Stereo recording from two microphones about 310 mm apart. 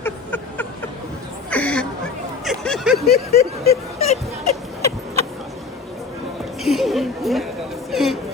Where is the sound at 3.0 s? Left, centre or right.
Left.